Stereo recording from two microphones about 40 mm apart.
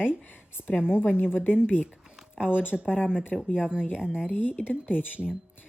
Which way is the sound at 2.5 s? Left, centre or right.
Left.